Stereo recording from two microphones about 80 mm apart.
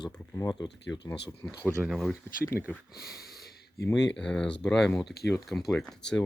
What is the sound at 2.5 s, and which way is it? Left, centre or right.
Speech, left.